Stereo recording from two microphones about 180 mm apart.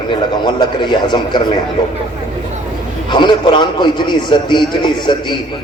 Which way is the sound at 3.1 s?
25° left (ahead or behind).